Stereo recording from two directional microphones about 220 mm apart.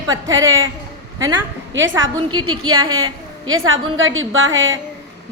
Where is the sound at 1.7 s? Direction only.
60° right (ahead or behind).